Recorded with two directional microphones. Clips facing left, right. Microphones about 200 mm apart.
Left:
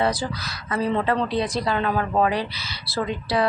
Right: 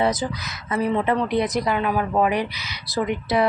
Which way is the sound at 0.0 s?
20° right (ahead or behind).